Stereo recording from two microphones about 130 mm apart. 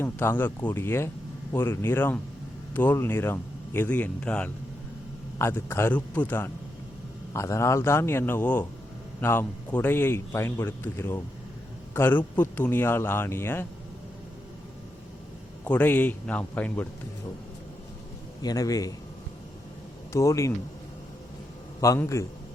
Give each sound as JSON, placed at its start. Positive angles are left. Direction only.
{"t": 0.0, "sound": "a man's voice", "side_deg": 15}
{"t": 5.4, "sound": "a man's voice", "side_deg": 20}
{"t": 15.6, "sound": "a man's voice", "side_deg": 15}
{"t": 18.4, "sound": "a man's voice", "side_deg": 30}
{"t": 20.1, "sound": "a man's voice", "side_deg": 25}
{"t": 21.8, "sound": "a man's voice", "side_deg": 25}